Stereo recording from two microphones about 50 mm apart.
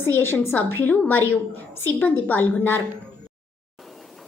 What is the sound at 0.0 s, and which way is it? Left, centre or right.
A woman's voice, left.